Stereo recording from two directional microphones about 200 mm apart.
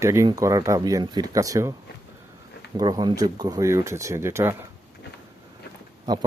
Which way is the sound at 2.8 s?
20° right (ahead or behind).